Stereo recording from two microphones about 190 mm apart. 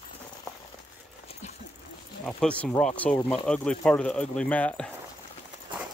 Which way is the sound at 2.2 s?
5° left (ahead or behind).